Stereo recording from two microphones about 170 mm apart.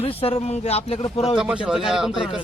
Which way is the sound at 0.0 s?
35° left (ahead or behind).